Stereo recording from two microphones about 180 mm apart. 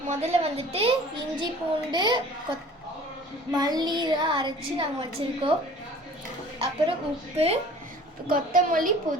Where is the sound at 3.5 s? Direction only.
20° right (ahead or behind).